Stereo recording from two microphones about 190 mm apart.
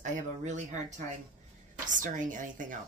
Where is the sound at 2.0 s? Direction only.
45° right (ahead or behind).